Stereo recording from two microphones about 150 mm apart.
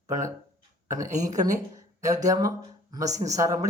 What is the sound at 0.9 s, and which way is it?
A man's voice, 20° right (ahead or behind).